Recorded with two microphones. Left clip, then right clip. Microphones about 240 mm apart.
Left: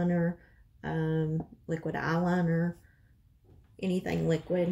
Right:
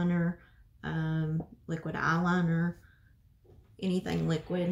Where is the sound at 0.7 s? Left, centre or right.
Centre.